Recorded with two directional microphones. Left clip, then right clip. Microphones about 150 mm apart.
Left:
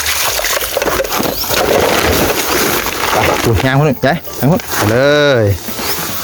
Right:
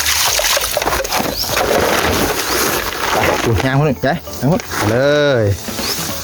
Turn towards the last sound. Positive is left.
turn(degrees=30)  # may be behind; listen again after turning